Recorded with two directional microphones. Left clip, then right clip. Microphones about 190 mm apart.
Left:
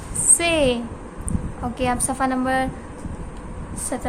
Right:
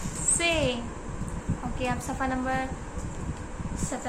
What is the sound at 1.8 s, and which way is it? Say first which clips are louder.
Speech: left 8 dB; 50° left (ahead or behind).